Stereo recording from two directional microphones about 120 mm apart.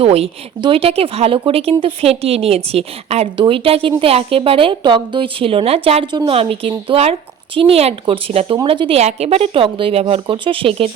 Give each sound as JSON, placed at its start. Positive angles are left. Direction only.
{"t": 0.0, "sound": "speech", "side_deg": -55}
{"t": 3.3, "sound": "a woman's voice", "side_deg": -45}
{"t": 9.0, "sound": "a woman's voice", "side_deg": -65}